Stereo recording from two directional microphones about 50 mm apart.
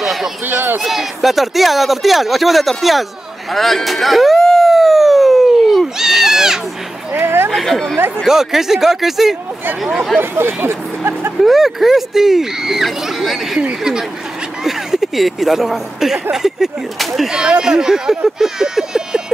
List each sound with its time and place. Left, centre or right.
0.0 s a sound: centre
0.5 s a man's voice: right
0.8 s speech: centre
3.5 s a sound: centre
7.2 s a sound: right
7.4 s speech: centre
8.3 s speech: centre
10.3 s speech: right
11.4 s speech: centre
14.6 s speech: centre
17.3 s speech: centre